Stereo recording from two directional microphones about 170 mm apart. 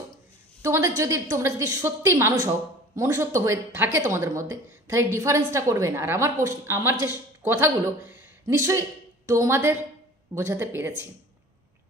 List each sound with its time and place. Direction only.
0.6 s a woman's voice: 20° right (ahead or behind)